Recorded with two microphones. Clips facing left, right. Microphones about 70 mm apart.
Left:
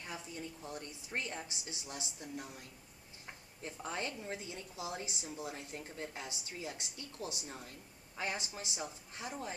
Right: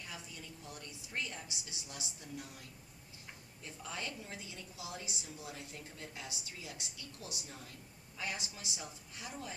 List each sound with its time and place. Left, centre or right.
0.0 s a woman's voice: left
3.6 s a woman's voice: left